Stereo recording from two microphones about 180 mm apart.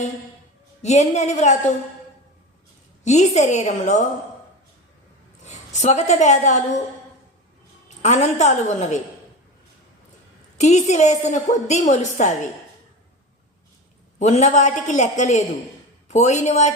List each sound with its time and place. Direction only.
0.8 s a woman's voice: 40° left (ahead or behind)
3.0 s a woman's voice: 40° left (ahead or behind)
5.5 s a woman's voice: 40° left (ahead or behind)
8.0 s a woman's voice: 40° left (ahead or behind)
10.6 s a woman's voice: 40° left (ahead or behind)
14.2 s a woman's voice: 40° left (ahead or behind)